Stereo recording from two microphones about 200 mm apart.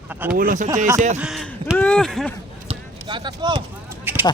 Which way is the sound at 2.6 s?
25° right (ahead or behind).